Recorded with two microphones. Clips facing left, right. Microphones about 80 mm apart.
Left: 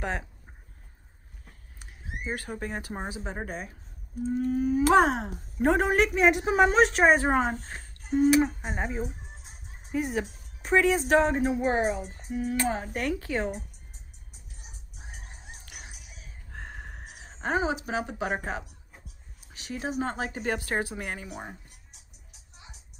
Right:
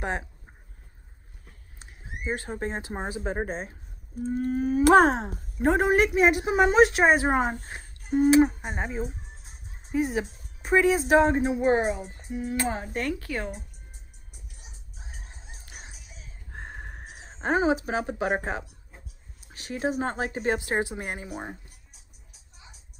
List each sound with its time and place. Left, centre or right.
0.0 s speech: centre
1.8 s speech: right
4.2 s a woman's voice: right
5.3 s a woman's voice: centre
9.0 s music: centre
9.9 s a woman's voice: centre
12.5 s a woman's voice: centre
12.9 s a woman's voice: centre
16.4 s a sound: centre
17.1 s a woman's voice: right
20.3 s speech: right